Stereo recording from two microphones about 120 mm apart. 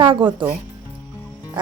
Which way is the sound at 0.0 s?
45° right (ahead or behind).